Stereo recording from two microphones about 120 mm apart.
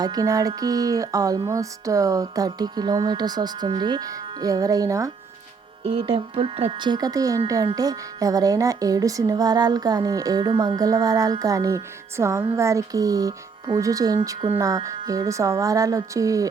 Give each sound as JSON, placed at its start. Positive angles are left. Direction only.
{"t": 0.0, "sound": "speech", "side_deg": -30}
{"t": 5.8, "sound": "speech", "side_deg": -50}